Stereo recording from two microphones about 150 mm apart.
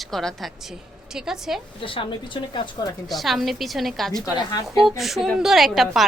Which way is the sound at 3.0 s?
Centre (ahead or behind).